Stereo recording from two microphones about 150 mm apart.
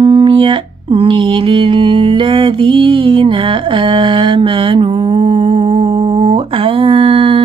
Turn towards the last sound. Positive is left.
turn(degrees=-40)  # may be behind; listen again after turning